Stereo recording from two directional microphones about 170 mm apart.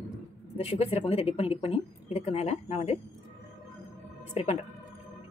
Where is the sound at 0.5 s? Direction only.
35° left (ahead or behind).